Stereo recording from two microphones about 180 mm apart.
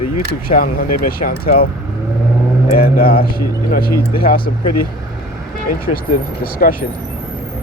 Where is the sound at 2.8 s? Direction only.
55° left (ahead or behind).